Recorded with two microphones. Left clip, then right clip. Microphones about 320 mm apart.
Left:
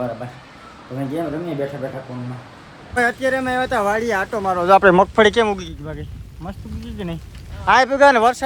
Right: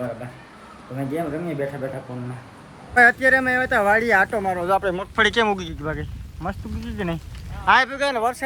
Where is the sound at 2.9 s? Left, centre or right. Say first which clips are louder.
Right 4 dB; centre.